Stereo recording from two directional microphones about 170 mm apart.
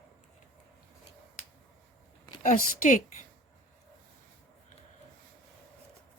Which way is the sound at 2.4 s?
50° left (ahead or behind).